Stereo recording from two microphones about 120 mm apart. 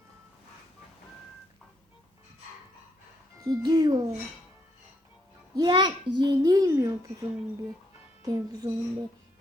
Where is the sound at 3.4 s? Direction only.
30° right (ahead or behind).